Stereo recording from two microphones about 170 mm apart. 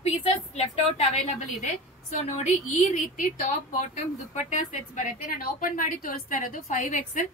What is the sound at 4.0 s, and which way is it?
A woman's voice, 45° left (ahead or behind).